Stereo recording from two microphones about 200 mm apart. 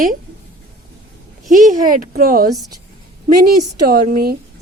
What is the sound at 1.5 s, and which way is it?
Speech, 45° right (ahead or behind).